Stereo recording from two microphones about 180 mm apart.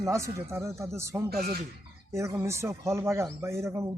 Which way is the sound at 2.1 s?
15° right (ahead or behind).